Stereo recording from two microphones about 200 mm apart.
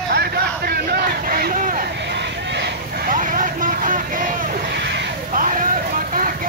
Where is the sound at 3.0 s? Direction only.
40° right (ahead or behind).